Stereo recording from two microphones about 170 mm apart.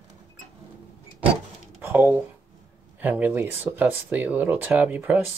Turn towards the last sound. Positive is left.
turn(degrees=-10)  # may be behind; listen again after turning